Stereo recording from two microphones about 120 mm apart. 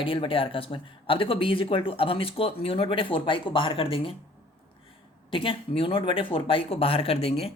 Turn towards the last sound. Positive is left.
turn(degrees=55)  # may be behind; listen again after turning